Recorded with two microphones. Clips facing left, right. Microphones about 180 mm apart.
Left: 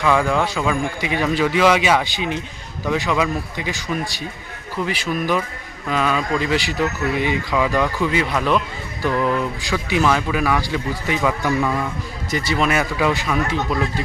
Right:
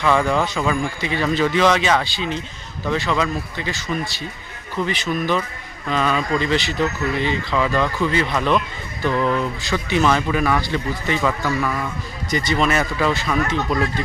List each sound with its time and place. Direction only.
0.0 s speech: 5° left (ahead or behind)
11.4 s a man's voice: 20° left (ahead or behind)
12.3 s speech: 5° left (ahead or behind)